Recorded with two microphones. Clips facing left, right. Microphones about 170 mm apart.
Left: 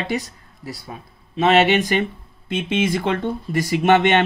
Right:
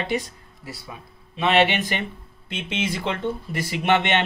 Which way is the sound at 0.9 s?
40° left (ahead or behind).